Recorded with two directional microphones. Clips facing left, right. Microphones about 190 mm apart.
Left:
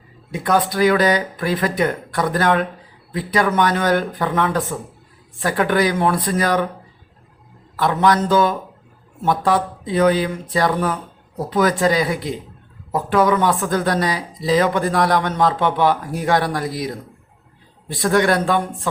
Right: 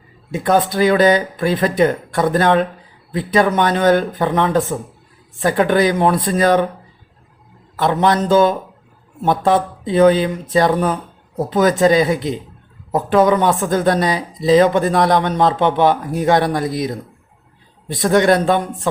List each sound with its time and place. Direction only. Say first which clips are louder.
0.3 s speech: right 3 dB; 25° right (ahead or behind)
7.8 s speech: right 1 dB; 25° right (ahead or behind)